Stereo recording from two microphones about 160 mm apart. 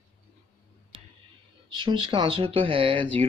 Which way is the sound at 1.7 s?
30° right (ahead or behind).